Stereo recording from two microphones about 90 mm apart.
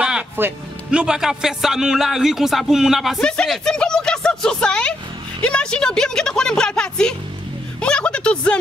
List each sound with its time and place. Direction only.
0.4 s speech: 25° right (ahead or behind)
0.9 s a man's voice: 10° right (ahead or behind)
3.2 s a woman's voice: 10° left (ahead or behind)
7.8 s a sound: 10° left (ahead or behind)